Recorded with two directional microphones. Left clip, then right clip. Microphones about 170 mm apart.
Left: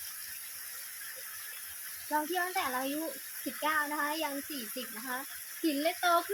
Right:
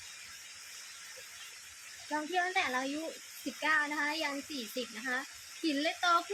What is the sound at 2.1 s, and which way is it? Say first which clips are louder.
Speech: left 1 dB; 25° right (ahead or behind).